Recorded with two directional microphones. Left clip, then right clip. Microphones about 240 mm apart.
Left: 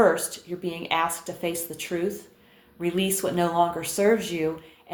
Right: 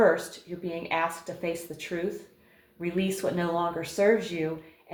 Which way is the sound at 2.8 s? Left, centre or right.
Left.